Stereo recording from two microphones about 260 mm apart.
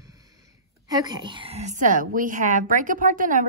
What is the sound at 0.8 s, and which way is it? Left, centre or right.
A woman's voice, centre.